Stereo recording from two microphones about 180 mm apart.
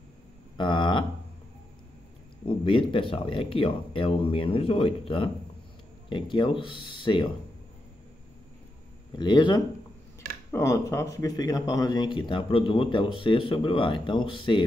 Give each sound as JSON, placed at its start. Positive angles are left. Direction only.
{"t": 0.6, "sound": "a sound", "side_deg": 25}
{"t": 2.4, "sound": "speech", "side_deg": 30}
{"t": 9.1, "sound": "speech", "side_deg": 25}